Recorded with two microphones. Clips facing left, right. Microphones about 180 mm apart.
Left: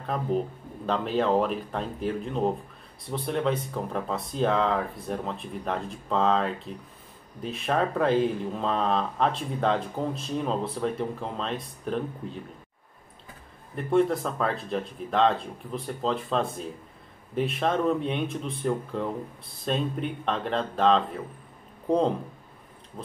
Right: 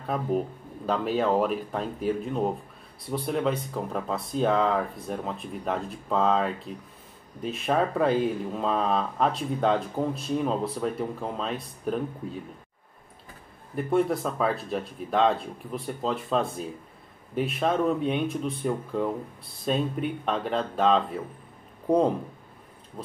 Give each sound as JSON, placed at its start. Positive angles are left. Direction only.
{"t": 0.0, "sound": "speech", "side_deg": -5}
{"t": 13.7, "sound": "speech", "side_deg": -5}